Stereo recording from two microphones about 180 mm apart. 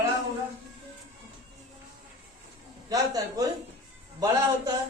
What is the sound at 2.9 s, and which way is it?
Speech, 20° right (ahead or behind).